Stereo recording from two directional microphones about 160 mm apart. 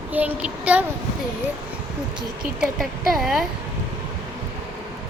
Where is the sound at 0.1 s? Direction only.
10° right (ahead or behind).